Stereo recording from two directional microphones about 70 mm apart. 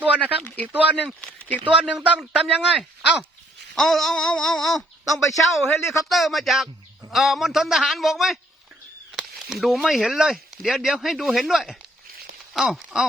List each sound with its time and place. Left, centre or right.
0.4 s a sound: left
0.7 s speech: right
1.2 s speech: left
1.8 s speech: centre
3.8 s speech: centre
5.0 s speech: left
5.6 s a man's voice: left
6.1 s speech: centre